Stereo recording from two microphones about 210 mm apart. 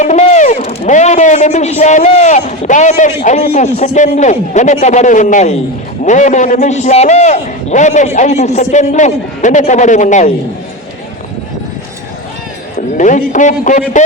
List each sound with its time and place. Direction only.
0.0 s a man's voice: 35° left (ahead or behind)
13.0 s a man's voice: 35° left (ahead or behind)